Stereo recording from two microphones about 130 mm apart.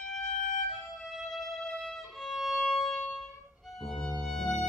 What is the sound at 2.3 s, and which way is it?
Violin, centre (ahead or behind).